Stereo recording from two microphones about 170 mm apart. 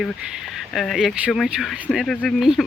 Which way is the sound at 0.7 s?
Centre (ahead or behind).